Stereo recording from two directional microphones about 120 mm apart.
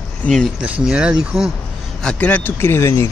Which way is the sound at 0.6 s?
10° right (ahead or behind).